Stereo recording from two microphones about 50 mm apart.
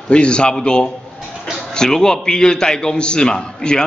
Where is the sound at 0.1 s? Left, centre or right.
Centre.